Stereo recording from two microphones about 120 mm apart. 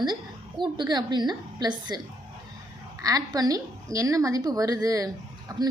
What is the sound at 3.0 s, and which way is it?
A woman's voice, 30° right (ahead or behind).